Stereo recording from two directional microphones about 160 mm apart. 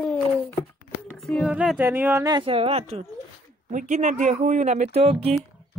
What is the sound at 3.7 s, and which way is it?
Speech, 50° right (ahead or behind).